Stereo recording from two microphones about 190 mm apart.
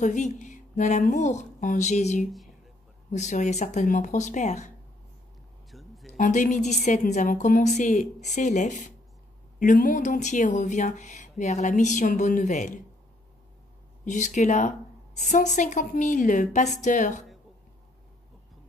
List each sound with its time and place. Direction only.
0.0 s speech: 40° left (ahead or behind)
5.7 s a sound: centre (ahead or behind)
6.1 s speech: 40° left (ahead or behind)
14.0 s speech: 40° left (ahead or behind)